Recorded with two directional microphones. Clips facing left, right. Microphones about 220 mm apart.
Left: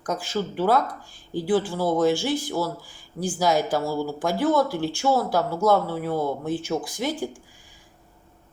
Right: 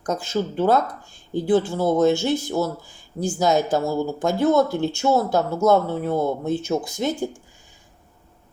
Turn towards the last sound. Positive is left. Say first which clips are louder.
# right 3 dB
turn(degrees=-25)  # may be behind; listen again after turning